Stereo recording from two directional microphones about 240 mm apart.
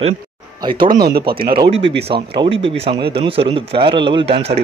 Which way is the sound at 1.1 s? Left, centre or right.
Right.